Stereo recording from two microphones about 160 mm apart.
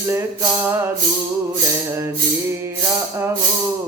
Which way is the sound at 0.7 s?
15° right (ahead or behind).